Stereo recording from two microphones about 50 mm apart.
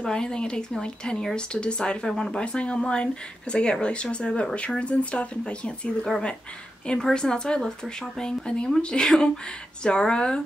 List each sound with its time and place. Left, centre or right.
0.0 s speech: centre
2.4 s speech: left
7.0 s speech: centre